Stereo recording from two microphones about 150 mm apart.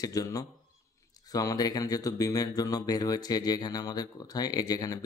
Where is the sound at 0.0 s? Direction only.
25° left (ahead or behind).